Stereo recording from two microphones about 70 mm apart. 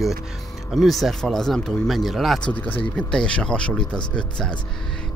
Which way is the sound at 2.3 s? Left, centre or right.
Centre.